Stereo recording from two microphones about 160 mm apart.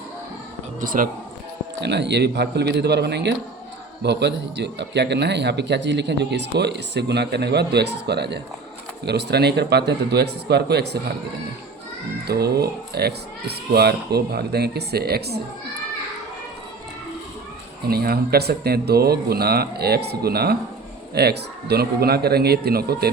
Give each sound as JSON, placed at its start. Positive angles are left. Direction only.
{"t": 0.8, "sound": "speech", "side_deg": -60}
{"t": 1.8, "sound": "a man's voice", "side_deg": -90}
{"t": 12.3, "sound": "speech", "side_deg": -80}
{"t": 17.8, "sound": "speech", "side_deg": -75}
{"t": 21.1, "sound": "speech", "side_deg": -90}